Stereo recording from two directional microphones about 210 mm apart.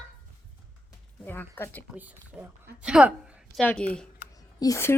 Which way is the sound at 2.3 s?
5° right (ahead or behind).